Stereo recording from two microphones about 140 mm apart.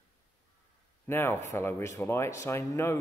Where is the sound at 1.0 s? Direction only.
15° left (ahead or behind).